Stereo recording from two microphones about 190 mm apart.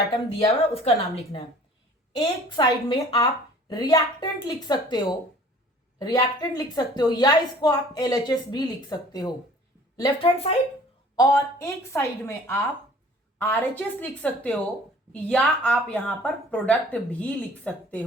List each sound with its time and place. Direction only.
0.7 s a woman's voice: 30° left (ahead or behind)
11.2 s a woman's voice: 15° left (ahead or behind)